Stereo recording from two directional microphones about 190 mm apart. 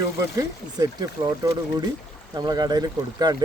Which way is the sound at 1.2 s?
20° right (ahead or behind).